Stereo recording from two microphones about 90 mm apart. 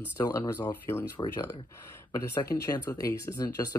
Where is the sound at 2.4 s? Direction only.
40° left (ahead or behind).